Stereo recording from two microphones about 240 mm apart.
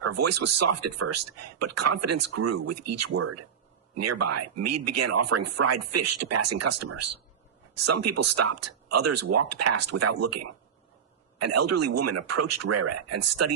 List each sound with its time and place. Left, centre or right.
0.0 s speech: right